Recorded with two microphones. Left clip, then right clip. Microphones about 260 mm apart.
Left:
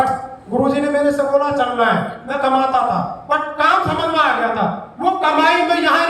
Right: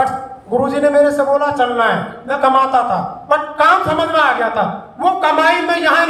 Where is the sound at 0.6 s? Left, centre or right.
Centre.